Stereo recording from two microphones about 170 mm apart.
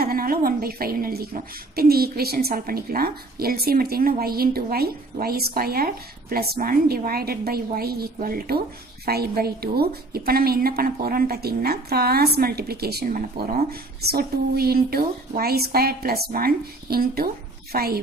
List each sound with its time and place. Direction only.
0.0 s a woman's voice: 60° right (ahead or behind)